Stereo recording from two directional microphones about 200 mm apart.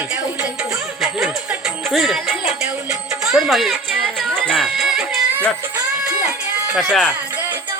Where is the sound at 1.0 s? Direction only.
5° right (ahead or behind).